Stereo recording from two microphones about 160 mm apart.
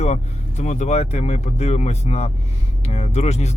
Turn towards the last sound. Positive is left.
turn(degrees=45)  # may be behind; listen again after turning